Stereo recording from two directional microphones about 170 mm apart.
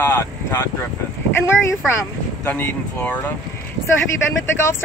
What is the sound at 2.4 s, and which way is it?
Speech, 10° left (ahead or behind).